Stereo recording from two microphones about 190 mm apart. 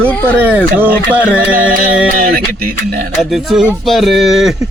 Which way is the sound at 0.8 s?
10° right (ahead or behind).